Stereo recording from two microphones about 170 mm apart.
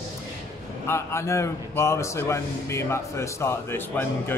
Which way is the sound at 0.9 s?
15° left (ahead or behind).